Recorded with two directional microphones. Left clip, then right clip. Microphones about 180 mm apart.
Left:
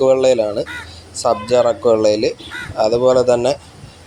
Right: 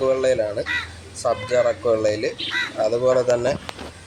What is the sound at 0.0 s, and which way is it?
Speech, 25° left (ahead or behind).